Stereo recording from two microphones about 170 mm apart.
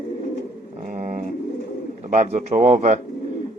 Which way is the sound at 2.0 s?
45° right (ahead or behind).